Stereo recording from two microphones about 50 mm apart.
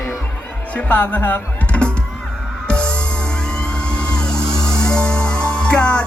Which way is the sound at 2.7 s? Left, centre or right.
Left.